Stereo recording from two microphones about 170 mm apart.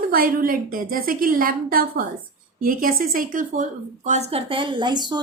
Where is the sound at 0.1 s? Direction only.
55° right (ahead or behind).